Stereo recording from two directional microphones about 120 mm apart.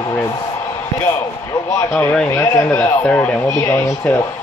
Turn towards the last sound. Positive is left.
turn(degrees=25)  # may be behind; listen again after turning